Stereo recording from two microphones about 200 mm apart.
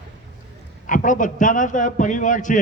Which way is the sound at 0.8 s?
40° left (ahead or behind).